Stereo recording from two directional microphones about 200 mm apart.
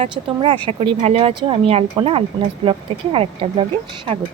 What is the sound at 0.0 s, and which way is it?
Speech, 25° right (ahead or behind).